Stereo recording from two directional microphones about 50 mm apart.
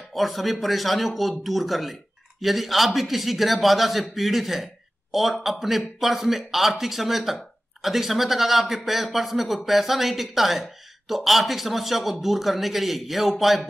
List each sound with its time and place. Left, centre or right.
0.1 s speech: centre